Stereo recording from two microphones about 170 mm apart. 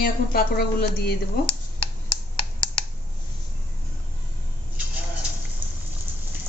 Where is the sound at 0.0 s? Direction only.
60° left (ahead or behind).